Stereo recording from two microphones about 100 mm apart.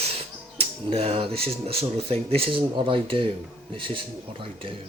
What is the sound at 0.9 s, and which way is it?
Speech, 80° right.